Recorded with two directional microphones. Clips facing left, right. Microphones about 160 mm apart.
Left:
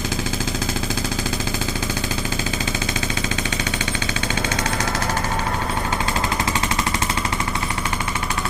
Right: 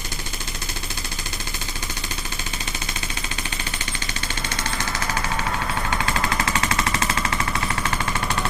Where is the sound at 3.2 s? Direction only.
90° left.